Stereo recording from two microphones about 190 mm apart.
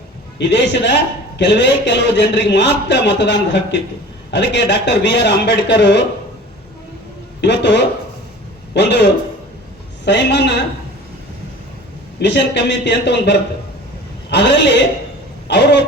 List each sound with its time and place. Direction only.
0.3 s a man's voice: 65° left (ahead or behind)
7.4 s a man's voice: 65° left (ahead or behind)
10.1 s speech: 65° left (ahead or behind)
12.2 s speech: 65° left (ahead or behind)